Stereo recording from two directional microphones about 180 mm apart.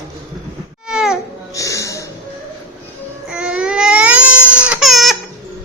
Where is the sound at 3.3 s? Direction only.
5° right (ahead or behind).